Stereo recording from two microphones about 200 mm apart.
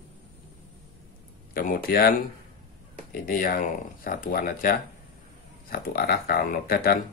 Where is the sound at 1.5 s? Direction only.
45° left (ahead or behind).